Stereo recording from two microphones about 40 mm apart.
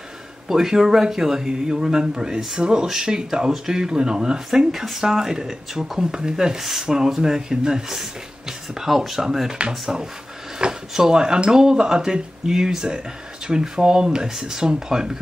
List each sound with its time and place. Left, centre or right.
0.5 s speech: centre
4.6 s speech: centre
6.6 s speech: centre